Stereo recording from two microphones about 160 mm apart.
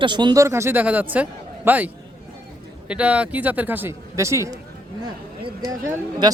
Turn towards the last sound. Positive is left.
turn(degrees=-25)  # may be behind; listen again after turning